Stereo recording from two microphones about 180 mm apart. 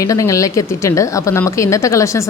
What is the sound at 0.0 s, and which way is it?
A woman's voice, 15° left (ahead or behind).